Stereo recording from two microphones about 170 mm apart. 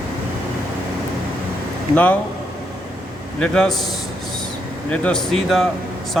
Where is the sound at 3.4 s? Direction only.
5° left (ahead or behind).